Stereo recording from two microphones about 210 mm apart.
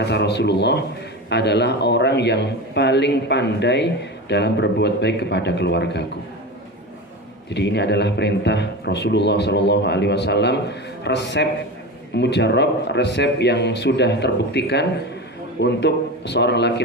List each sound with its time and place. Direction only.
0.0 s a man's voice: 55° left (ahead or behind)
7.5 s a man's voice: 55° left (ahead or behind)